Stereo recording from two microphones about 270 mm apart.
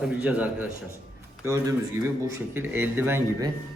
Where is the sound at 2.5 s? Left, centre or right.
Centre.